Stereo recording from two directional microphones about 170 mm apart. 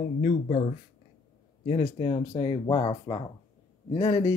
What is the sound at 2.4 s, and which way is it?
Speech, 30° left (ahead or behind).